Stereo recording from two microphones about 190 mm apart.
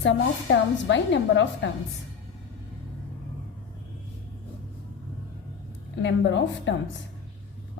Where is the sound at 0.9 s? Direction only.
70° left (ahead or behind).